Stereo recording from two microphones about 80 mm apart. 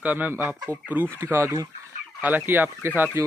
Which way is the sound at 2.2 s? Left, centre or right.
Right.